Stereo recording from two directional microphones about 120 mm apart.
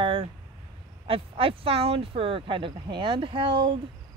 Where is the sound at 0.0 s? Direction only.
50° right (ahead or behind).